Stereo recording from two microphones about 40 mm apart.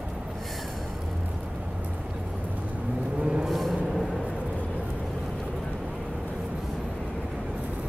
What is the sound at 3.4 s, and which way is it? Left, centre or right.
Vehicle, centre.